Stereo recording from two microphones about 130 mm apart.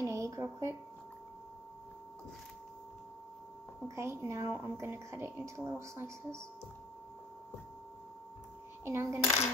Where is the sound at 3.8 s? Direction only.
20° right (ahead or behind).